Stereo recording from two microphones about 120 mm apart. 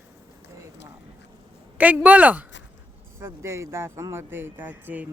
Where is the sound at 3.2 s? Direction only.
25° right (ahead or behind).